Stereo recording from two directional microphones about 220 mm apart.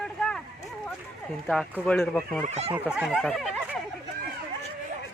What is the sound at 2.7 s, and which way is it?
Speech, 5° right (ahead or behind).